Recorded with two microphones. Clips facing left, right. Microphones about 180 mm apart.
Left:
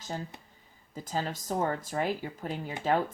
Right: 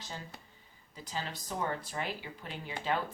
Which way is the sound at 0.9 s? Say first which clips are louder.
Left 7 dB; 45° left (ahead or behind).